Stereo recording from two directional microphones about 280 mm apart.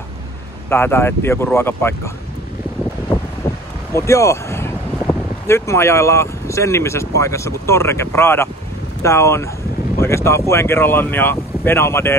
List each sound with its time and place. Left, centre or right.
0.7 s speech: centre
3.9 s speech: centre